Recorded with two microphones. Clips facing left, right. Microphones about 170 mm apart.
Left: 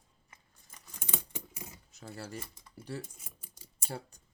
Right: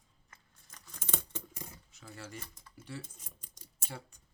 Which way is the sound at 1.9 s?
40° left (ahead or behind).